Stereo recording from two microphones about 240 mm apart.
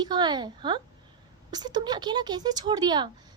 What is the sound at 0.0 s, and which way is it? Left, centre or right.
A woman's voice, centre.